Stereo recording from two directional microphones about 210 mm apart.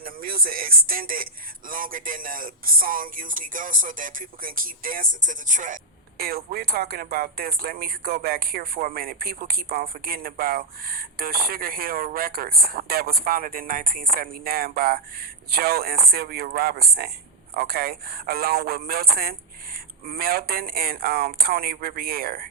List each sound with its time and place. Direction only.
0.0 s speech: 45° right (ahead or behind)